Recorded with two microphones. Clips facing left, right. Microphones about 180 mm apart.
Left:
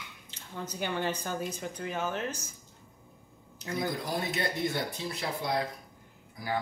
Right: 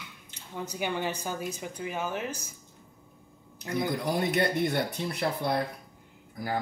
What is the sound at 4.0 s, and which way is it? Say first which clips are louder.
Speech: right 6 dB; 65° right (ahead or behind).